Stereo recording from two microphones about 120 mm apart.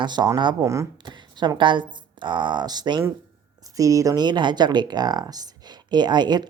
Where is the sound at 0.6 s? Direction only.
25° right (ahead or behind).